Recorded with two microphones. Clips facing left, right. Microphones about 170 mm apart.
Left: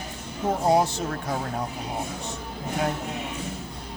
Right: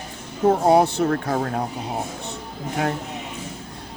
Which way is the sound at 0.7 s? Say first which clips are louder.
Right 5 dB; 60° right (ahead or behind).